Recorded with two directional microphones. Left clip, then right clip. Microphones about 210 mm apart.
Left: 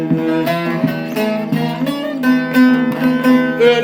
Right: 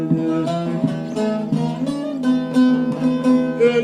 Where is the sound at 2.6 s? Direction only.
35° left (ahead or behind).